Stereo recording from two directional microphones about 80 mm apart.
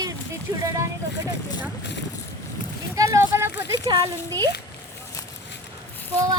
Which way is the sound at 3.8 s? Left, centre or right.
Right.